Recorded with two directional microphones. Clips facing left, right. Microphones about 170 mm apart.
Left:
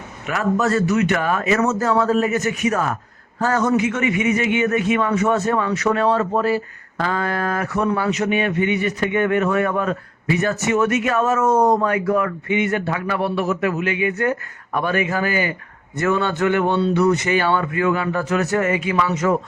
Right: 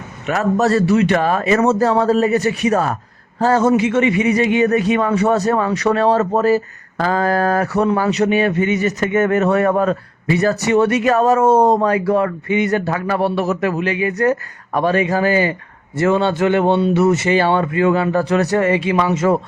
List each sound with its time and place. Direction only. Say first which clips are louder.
0.3 s speech: right 4 dB; 35° right (ahead or behind)